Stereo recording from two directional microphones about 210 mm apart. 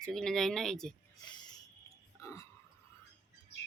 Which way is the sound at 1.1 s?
20° left (ahead or behind).